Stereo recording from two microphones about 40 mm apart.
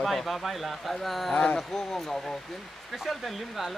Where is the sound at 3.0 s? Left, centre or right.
Centre.